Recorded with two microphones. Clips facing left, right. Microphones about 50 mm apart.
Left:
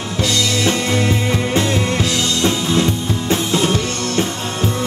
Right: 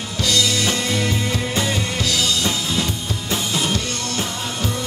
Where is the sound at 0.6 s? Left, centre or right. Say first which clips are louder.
Left 4 dB; centre.